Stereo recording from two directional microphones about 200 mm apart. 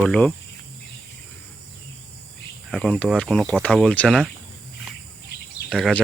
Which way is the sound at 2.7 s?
5° left (ahead or behind).